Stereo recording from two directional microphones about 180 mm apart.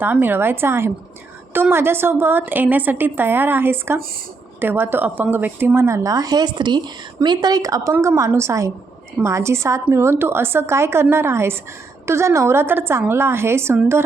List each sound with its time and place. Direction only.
0.0 s speech: 10° right (ahead or behind)